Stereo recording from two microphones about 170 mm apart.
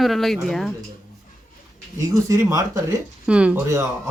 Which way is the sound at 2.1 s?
20° right (ahead or behind).